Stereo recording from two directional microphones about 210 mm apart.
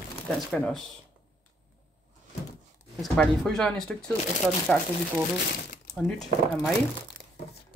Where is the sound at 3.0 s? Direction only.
Centre (ahead or behind).